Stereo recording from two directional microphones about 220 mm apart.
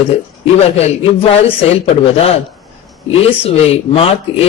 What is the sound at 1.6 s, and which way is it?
A man's voice, 30° left (ahead or behind).